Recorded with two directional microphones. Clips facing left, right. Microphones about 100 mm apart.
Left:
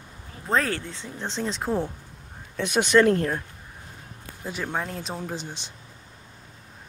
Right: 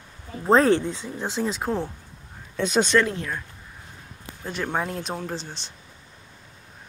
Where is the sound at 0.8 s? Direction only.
15° right (ahead or behind).